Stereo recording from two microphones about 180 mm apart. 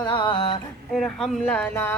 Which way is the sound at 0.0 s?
25° left (ahead or behind).